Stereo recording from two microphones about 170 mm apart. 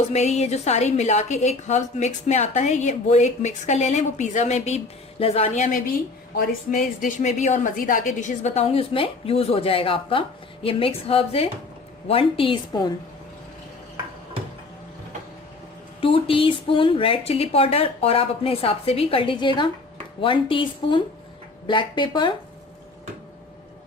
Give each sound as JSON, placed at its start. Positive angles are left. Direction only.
{"t": 0.0, "sound": "a woman's voice", "side_deg": 40}
{"t": 8.6, "sound": "a woman's voice", "side_deg": 35}
{"t": 16.0, "sound": "a woman's voice", "side_deg": 30}